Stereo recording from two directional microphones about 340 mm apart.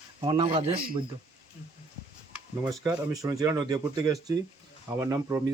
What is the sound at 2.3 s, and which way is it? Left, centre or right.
Speech, centre.